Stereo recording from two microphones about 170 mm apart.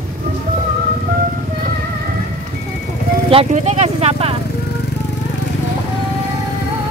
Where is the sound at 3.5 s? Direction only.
40° right (ahead or behind).